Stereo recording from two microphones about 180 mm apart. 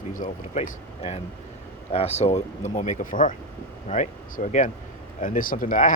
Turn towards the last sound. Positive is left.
turn(degrees=45)  # may be behind; listen again after turning